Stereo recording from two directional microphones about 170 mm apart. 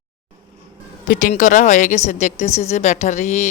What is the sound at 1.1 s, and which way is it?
A woman's voice, 50° left (ahead or behind).